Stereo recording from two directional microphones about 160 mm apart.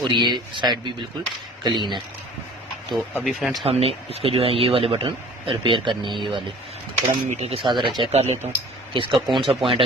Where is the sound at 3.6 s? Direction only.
40° right (ahead or behind).